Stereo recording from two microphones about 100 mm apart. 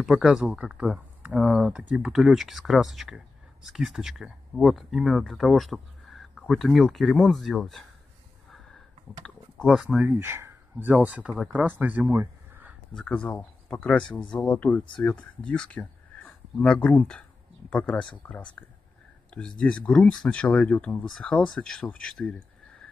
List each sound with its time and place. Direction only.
0.0 s speech: centre (ahead or behind)
9.7 s speech: 5° right (ahead or behind)
10.1 s speech: 25° right (ahead or behind)
12.1 s a sound: 20° right (ahead or behind)
12.9 s speech: 10° left (ahead or behind)